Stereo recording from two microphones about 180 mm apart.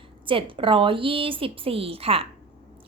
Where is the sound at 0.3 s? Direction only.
30° right (ahead or behind).